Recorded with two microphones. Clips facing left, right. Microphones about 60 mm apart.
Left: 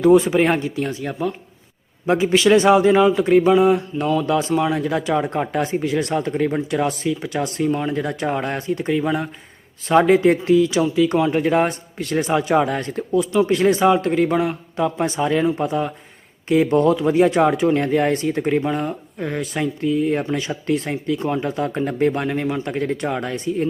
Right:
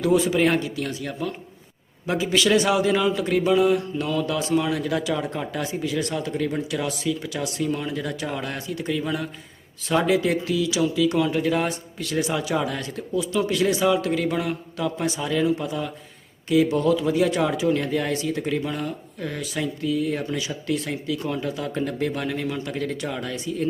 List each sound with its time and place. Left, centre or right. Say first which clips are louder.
0.0 s a man's voice: left 6 dB; left
4.3 s a man's voice: left 4 dB; left
5.1 s speech: left 7 dB; left
9.9 s speech: left 7 dB; left